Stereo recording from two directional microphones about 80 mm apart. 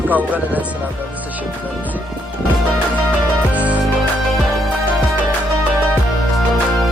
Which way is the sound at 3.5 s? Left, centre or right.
Centre.